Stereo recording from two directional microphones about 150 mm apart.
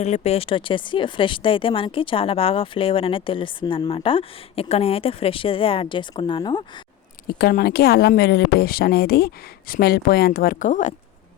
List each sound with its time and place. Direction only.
0.0 s speech: 45° left (ahead or behind)
7.3 s speech: 90° left; by 10.9 s 55° left (ahead or behind)